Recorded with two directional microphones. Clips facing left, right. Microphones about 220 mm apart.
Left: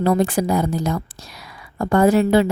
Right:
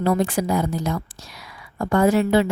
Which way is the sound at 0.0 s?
35° left (ahead or behind).